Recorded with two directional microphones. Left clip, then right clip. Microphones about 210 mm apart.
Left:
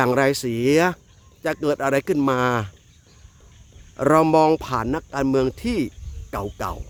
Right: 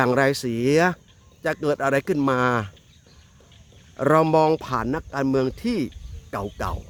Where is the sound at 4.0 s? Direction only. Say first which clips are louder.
Left 2 dB; 15° left (ahead or behind).